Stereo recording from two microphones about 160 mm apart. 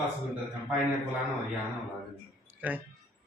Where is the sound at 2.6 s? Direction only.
10° right (ahead or behind).